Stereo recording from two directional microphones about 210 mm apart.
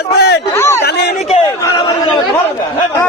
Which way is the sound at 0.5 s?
10° left (ahead or behind).